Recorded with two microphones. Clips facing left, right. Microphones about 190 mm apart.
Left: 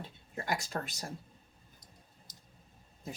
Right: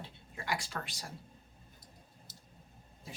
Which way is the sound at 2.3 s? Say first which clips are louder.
Right 2 dB; 15° left (ahead or behind).